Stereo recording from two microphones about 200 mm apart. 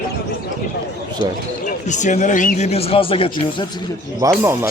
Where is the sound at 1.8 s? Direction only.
35° left (ahead or behind).